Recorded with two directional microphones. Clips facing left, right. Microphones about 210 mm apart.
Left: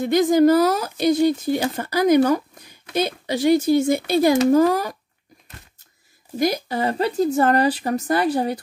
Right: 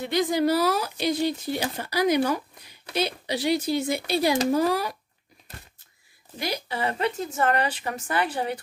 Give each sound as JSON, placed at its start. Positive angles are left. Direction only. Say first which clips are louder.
{"t": 0.0, "sound": "speech", "louder": "left 8 dB", "side_deg": 45}
{"t": 6.3, "sound": "speech", "louder": "left 9 dB", "side_deg": 45}